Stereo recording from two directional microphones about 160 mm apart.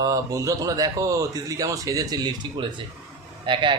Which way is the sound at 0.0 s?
20° right (ahead or behind).